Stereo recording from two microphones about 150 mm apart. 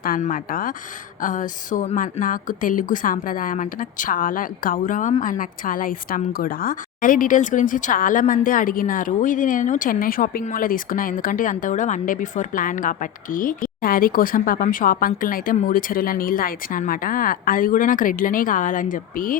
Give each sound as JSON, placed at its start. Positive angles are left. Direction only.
{"t": 0.0, "sound": "a woman's voice", "side_deg": 65}